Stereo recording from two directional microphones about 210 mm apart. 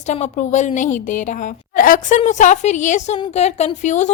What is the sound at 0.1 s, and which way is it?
A woman's voice, 35° left (ahead or behind).